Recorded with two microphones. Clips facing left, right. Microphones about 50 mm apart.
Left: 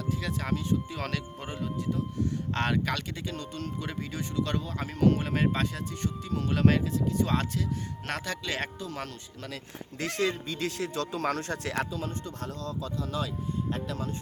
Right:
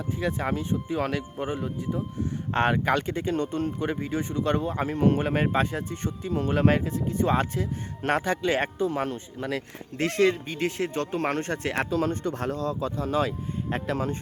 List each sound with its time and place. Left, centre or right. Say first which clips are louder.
0.2 s speech: right 4 dB; right
9.6 s speech: right 7 dB; right
10.4 s speech: right 4 dB; right